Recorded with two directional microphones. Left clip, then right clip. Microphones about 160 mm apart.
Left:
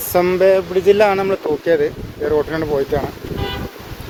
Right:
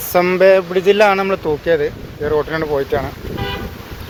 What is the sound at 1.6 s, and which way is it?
Speech, 35° left (ahead or behind).